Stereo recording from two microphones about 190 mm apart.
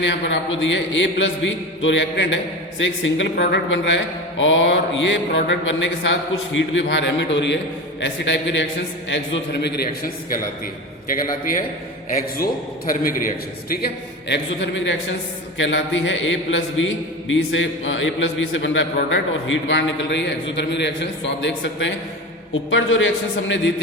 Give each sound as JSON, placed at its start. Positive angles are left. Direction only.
{"t": 0.0, "sound": "a man's voice", "side_deg": 75}
{"t": 11.1, "sound": "a man's voice", "side_deg": 50}
{"t": 12.9, "sound": "a man's voice", "side_deg": 50}
{"t": 15.5, "sound": "a man's voice", "side_deg": 75}
{"t": 22.7, "sound": "a man's voice", "side_deg": 85}